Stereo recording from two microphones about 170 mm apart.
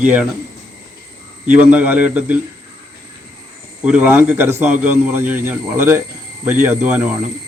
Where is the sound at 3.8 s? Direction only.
10° right (ahead or behind).